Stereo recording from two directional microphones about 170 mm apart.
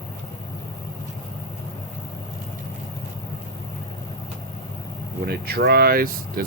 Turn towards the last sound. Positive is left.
turn(degrees=-60)  # may be behind; listen again after turning